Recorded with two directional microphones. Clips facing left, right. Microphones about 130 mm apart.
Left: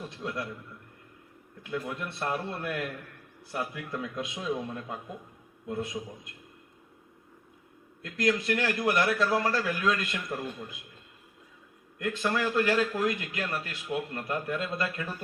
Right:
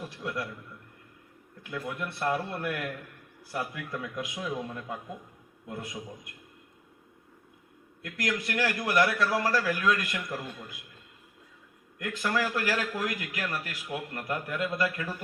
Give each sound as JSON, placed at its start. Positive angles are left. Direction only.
{"t": 0.1, "sound": "a man's voice", "side_deg": 25}
{"t": 1.9, "sound": "a man's voice", "side_deg": 25}
{"t": 8.0, "sound": "a man's voice", "side_deg": 25}
{"t": 11.9, "sound": "a man's voice", "side_deg": 25}